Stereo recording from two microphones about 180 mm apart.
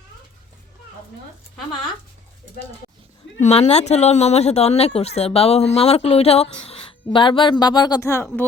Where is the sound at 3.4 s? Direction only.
35° left (ahead or behind).